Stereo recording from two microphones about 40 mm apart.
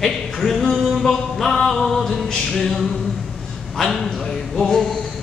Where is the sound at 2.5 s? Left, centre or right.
Centre.